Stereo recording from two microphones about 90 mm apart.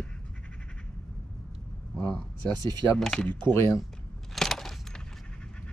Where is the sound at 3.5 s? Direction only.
30° left (ahead or behind).